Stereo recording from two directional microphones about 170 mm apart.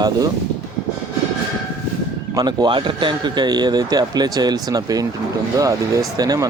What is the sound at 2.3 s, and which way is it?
A man's voice, 25° right (ahead or behind).